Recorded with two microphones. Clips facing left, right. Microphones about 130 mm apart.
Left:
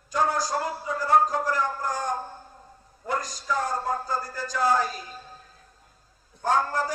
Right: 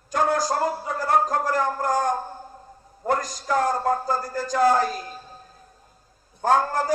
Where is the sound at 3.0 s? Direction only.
55° right (ahead or behind).